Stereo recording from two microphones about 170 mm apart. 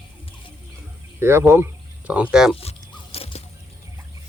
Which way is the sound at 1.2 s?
15° right (ahead or behind).